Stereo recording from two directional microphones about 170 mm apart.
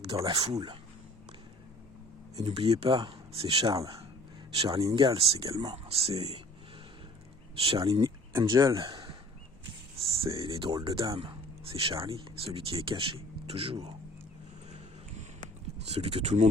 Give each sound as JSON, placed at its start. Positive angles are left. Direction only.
{"t": 0.0, "sound": "speech", "side_deg": -20}
{"t": 2.3, "sound": "speech", "side_deg": -35}
{"t": 7.6, "sound": "speech", "side_deg": -35}
{"t": 8.0, "sound": "a sound", "side_deg": -15}
{"t": 8.4, "sound": "speech", "side_deg": -25}
{"t": 15.8, "sound": "speech", "side_deg": -40}